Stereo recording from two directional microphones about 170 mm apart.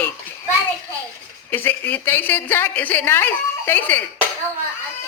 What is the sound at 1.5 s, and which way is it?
A woman's voice, 10° left (ahead or behind).